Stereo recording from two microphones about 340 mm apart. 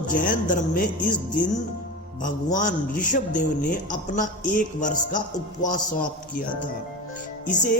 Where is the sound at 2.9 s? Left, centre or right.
Left.